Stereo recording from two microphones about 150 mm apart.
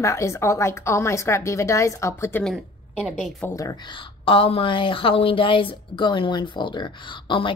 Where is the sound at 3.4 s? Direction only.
20° left (ahead or behind).